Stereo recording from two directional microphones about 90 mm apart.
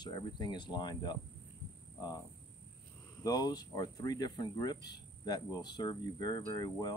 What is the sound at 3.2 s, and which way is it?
Speech, 45° left (ahead or behind).